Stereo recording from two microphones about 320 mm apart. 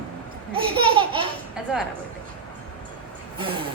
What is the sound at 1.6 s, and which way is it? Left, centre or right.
Speech, centre.